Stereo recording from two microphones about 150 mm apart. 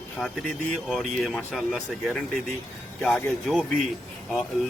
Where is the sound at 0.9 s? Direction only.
5° left (ahead or behind).